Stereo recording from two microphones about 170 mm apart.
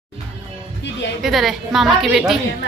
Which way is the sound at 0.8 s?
90° left.